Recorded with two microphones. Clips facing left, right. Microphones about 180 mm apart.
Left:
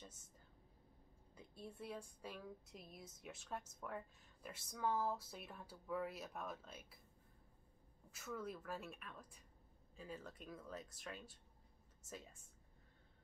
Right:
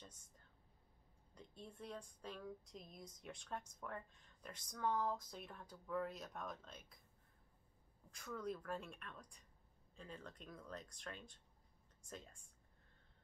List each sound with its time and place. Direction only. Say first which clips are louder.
1.3 s a woman's voice: left 2 dB; 5° left (ahead or behind)
8.1 s a woman's voice: right 1 dB; 5° left (ahead or behind)